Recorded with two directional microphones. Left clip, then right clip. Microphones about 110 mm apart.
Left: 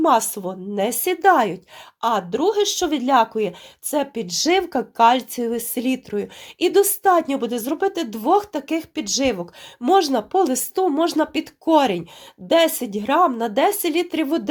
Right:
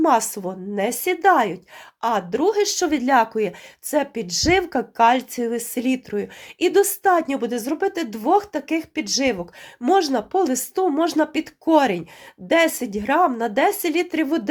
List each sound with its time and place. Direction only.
0.0 s speech: 5° left (ahead or behind)
0.8 s speech: 20° left (ahead or behind)
2.0 s speech: 5° left (ahead or behind)